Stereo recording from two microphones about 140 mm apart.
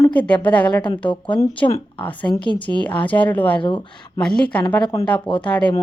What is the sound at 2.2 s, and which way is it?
Speech, 35° left (ahead or behind).